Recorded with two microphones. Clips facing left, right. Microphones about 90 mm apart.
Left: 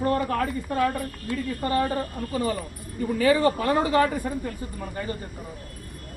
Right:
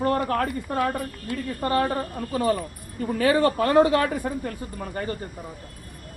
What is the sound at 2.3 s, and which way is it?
Speech, 70° right (ahead or behind).